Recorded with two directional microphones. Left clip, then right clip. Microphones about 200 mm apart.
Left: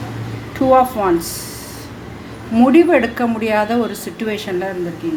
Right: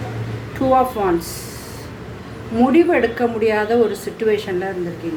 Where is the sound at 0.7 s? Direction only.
30° left (ahead or behind).